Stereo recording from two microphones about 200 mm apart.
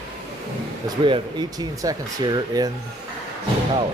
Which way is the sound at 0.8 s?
25° right (ahead or behind).